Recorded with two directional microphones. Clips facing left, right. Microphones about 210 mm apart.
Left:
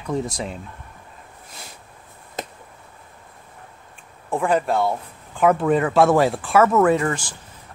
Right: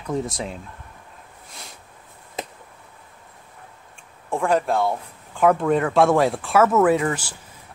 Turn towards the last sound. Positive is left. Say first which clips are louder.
# even
turn(degrees=-5)  # may be behind; listen again after turning